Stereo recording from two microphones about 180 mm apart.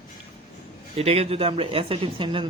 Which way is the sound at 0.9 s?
35° right (ahead or behind).